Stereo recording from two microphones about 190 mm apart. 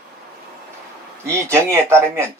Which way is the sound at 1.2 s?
15° right (ahead or behind).